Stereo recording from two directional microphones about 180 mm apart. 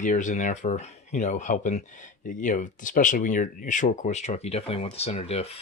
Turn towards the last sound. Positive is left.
turn(degrees=35)  # may be behind; listen again after turning